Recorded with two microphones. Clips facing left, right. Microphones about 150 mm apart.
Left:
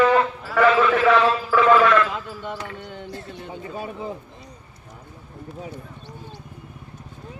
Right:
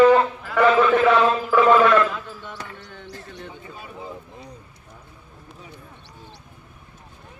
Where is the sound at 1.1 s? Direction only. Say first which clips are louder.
Even; 25° right (ahead or behind).